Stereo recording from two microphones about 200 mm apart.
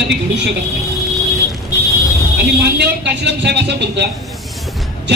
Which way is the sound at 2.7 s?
60° right (ahead or behind).